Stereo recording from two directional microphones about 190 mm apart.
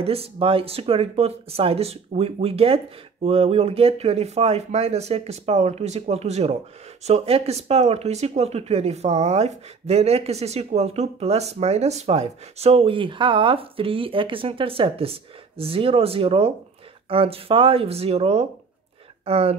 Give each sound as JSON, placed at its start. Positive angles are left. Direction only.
{"t": 0.0, "sound": "speech", "side_deg": -30}